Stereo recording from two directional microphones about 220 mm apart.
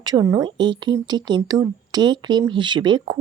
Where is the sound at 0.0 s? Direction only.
20° right (ahead or behind).